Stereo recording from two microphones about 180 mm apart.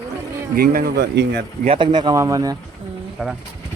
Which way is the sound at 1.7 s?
25° right (ahead or behind).